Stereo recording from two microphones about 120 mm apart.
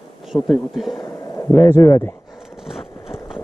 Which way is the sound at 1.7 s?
25° left (ahead or behind).